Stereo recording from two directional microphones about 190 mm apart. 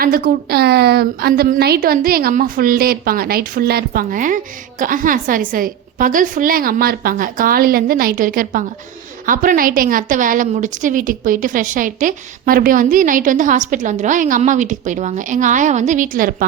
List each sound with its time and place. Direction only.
0.0 s a woman's voice: 50° right (ahead or behind)